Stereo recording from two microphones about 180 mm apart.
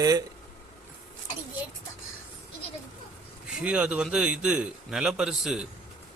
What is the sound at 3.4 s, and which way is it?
A man's voice, 5° right (ahead or behind).